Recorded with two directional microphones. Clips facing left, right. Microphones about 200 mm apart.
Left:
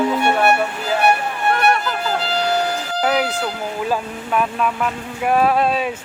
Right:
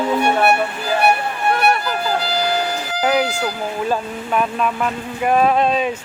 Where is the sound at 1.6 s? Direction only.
5° right (ahead or behind).